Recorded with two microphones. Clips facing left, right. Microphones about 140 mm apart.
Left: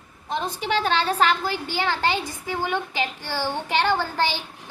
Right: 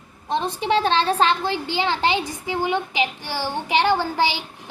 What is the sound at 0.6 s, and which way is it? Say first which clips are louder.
A woman's voice: right 3 dB; 30° right (ahead or behind).